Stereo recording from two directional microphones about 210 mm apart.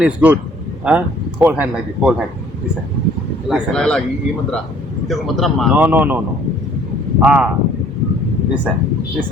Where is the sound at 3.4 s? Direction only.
Centre (ahead or behind).